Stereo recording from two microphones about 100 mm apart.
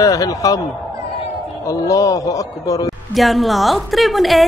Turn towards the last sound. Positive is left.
turn(degrees=0)  # may be behind; listen again after turning